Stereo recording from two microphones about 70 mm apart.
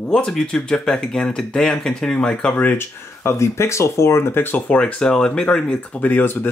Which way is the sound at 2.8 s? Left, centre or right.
Left.